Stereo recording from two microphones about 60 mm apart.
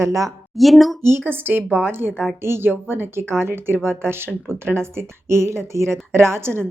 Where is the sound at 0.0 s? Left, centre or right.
Right.